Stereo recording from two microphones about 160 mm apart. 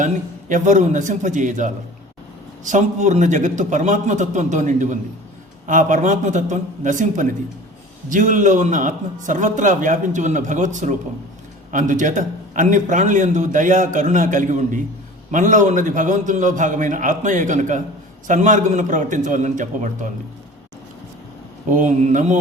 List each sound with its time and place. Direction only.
0.0 s a man's voice: 50° right (ahead or behind)
21.7 s a man's voice: 55° right (ahead or behind)